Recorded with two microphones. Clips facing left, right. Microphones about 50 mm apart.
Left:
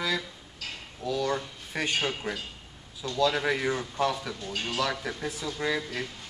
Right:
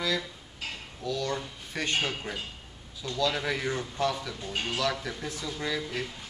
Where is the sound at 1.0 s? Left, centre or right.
Centre.